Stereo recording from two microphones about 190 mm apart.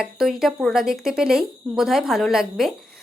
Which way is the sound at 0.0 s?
Centre (ahead or behind).